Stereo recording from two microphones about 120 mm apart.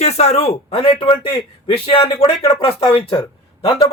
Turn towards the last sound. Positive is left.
turn(degrees=45)  # may be behind; listen again after turning